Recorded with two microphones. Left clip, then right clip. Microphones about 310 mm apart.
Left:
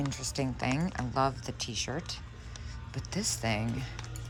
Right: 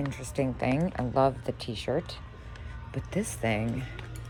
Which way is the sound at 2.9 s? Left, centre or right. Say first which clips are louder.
Right 1 dB; centre.